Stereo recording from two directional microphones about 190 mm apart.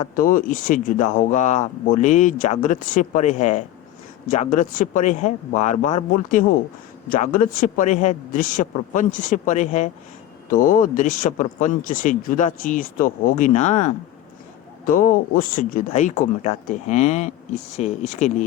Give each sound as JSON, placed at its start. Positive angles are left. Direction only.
{"t": 0.0, "sound": "speech", "side_deg": 45}